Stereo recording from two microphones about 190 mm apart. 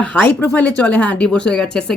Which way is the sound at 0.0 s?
5° left (ahead or behind).